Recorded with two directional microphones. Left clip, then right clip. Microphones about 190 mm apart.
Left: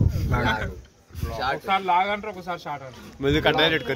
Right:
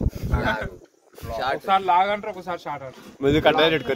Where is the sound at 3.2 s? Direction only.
55° right (ahead or behind).